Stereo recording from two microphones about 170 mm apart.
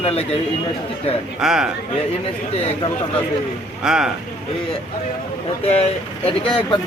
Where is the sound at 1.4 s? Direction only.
5° right (ahead or behind).